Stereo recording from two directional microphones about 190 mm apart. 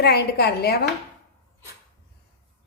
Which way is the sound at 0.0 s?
55° left (ahead or behind).